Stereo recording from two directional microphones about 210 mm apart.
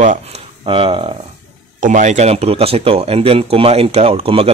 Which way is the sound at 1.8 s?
35° right (ahead or behind).